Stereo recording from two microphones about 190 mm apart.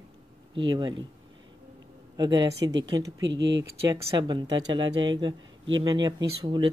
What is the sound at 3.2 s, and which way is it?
Speech, 70° right (ahead or behind).